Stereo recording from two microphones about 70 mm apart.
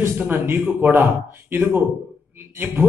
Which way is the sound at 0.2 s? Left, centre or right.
Right.